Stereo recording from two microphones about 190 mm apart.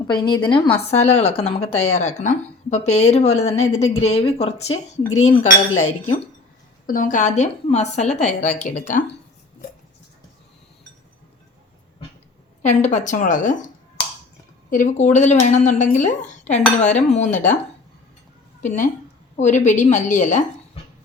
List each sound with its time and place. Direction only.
0.1 s a woman's voice: 25° left (ahead or behind); by 9.0 s 40° left (ahead or behind)
12.6 s a woman's voice: 40° left (ahead or behind)
14.7 s a woman's voice: 40° left (ahead or behind)
18.6 s a woman's voice: 40° left (ahead or behind)